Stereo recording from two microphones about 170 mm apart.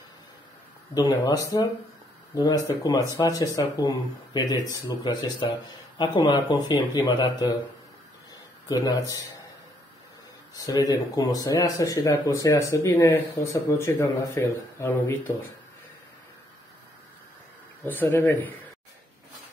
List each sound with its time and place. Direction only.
0.9 s speech: 20° left (ahead or behind)
8.6 s speech: 20° left (ahead or behind)
10.5 s speech: 20° left (ahead or behind)
17.8 s speech: 10° left (ahead or behind)